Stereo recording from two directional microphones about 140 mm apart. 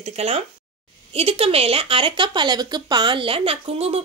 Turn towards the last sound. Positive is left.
turn(degrees=-45)  # may be behind; listen again after turning